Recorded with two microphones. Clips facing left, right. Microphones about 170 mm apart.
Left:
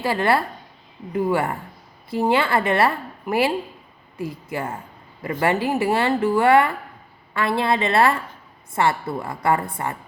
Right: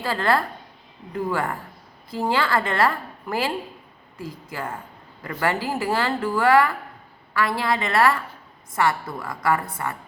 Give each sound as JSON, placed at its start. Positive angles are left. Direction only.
{"t": 0.0, "sound": "speech", "side_deg": 20}